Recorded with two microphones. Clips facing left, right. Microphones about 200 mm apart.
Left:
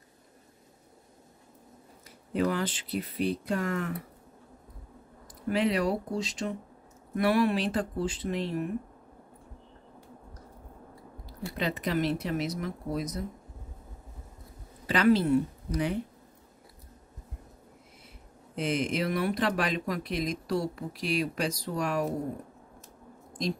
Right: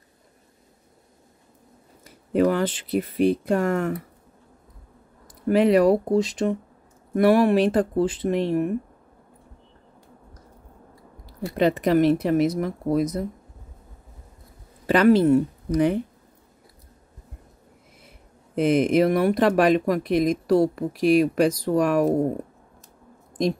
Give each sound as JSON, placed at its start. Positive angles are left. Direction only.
{"t": 2.0, "sound": "speech", "side_deg": -55}
{"t": 5.5, "sound": "speech", "side_deg": -55}
{"t": 11.5, "sound": "speech", "side_deg": -55}
{"t": 14.9, "sound": "speech", "side_deg": -50}
{"t": 18.5, "sound": "speech", "side_deg": -55}